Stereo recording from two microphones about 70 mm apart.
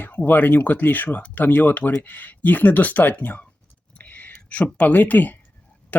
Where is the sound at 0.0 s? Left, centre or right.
Left.